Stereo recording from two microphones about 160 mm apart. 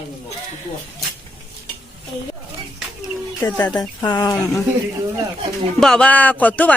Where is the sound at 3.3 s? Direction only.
20° left (ahead or behind).